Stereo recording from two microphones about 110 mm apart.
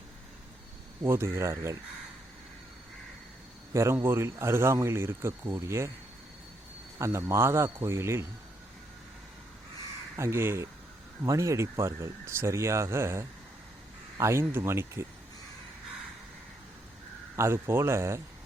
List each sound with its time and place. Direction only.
1.0 s speech: 20° right (ahead or behind)
3.7 s speech: 25° right (ahead or behind)
7.0 s speech: 25° right (ahead or behind)
10.2 s speech: 25° right (ahead or behind)
17.3 s speech: 25° right (ahead or behind)